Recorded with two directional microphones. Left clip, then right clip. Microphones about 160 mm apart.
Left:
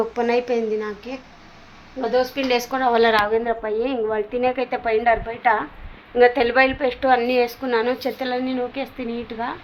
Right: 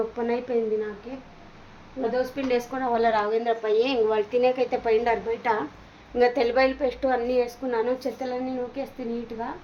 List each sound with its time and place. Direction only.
0.2 s a woman's voice: 30° left (ahead or behind)
2.0 s a woman's voice: 30° left (ahead or behind)
3.2 s a woman's voice: 5° left (ahead or behind); by 8.9 s 20° left (ahead or behind)